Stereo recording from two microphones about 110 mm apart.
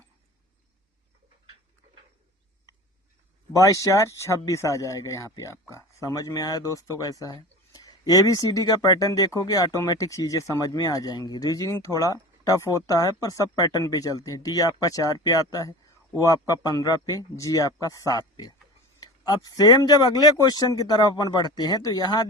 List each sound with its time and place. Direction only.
3.5 s speech: 30° left (ahead or behind)